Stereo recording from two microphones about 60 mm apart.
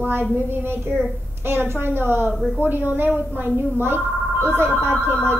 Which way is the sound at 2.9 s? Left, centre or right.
Right.